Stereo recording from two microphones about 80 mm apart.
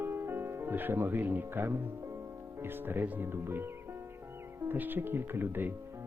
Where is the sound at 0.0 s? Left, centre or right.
Right.